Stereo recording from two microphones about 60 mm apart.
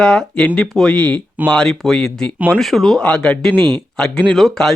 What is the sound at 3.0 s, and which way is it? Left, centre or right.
Speech, centre.